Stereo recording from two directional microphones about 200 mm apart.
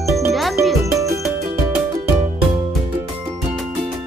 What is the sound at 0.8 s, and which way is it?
Music, 15° right (ahead or behind).